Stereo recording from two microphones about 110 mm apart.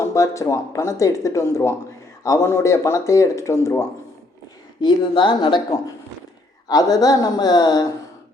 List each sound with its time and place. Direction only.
0.0 s speech: 25° left (ahead or behind)
4.8 s speech: 45° left (ahead or behind)
6.7 s speech: 35° left (ahead or behind)